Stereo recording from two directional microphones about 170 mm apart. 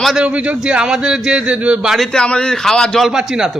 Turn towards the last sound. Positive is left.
turn(degrees=-5)  # may be behind; listen again after turning